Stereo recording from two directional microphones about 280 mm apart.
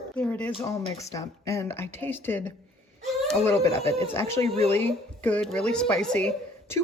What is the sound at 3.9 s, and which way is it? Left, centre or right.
Speech, centre.